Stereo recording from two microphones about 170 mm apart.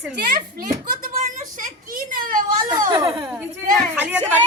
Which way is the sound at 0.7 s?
55° right (ahead or behind).